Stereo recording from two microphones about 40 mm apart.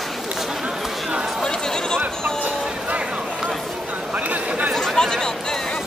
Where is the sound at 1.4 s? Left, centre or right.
Centre.